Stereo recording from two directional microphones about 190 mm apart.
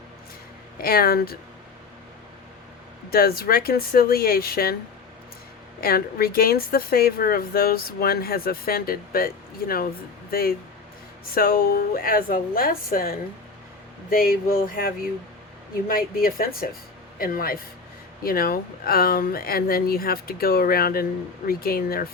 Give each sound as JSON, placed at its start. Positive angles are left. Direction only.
{"t": 0.8, "sound": "a woman's voice", "side_deg": 50}
{"t": 3.1, "sound": "a woman's voice", "side_deg": 50}
{"t": 5.8, "sound": "a woman's voice", "side_deg": 50}
{"t": 11.3, "sound": "a woman's voice", "side_deg": 50}